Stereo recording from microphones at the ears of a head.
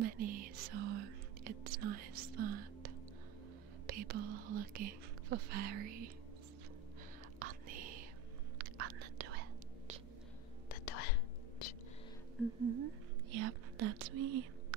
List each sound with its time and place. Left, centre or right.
0.0 s whispering: right
3.8 s speech: right
7.3 s whispering: right
10.7 s whispering: left
12.6 s whispering: right